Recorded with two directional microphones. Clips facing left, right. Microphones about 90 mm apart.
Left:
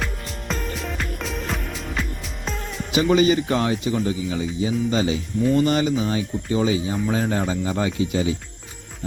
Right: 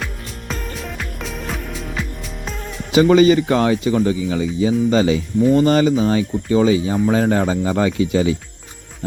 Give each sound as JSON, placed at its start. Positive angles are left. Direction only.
{"t": 0.0, "sound": "music", "side_deg": 0}
{"t": 2.9, "sound": "speech", "side_deg": -45}
{"t": 3.5, "sound": "speech", "side_deg": -55}
{"t": 5.5, "sound": "speech", "side_deg": -40}